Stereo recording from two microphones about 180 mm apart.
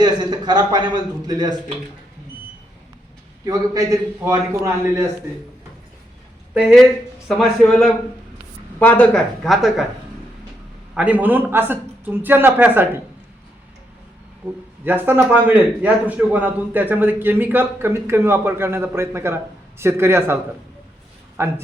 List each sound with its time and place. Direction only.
0.0 s speech: 25° right (ahead or behind)
3.4 s a man's voice: 20° right (ahead or behind)
6.5 s speech: 5° right (ahead or behind)
10.9 s a man's voice: 10° right (ahead or behind)
14.8 s a man's voice: 10° right (ahead or behind)